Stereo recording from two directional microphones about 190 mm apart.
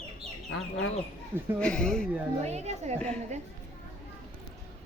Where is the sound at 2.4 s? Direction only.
35° right (ahead or behind).